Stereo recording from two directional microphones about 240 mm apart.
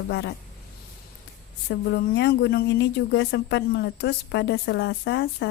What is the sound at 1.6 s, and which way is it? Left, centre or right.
Speech, left.